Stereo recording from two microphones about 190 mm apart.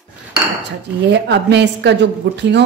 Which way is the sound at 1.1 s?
65° right (ahead or behind).